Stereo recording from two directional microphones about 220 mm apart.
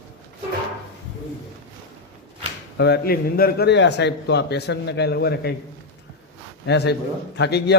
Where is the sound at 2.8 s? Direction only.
50° left (ahead or behind).